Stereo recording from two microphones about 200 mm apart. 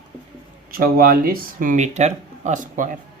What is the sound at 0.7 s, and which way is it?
Speech, 45° right (ahead or behind).